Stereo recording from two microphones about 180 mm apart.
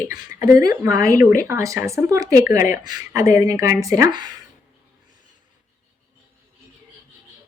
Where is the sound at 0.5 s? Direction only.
20° right (ahead or behind).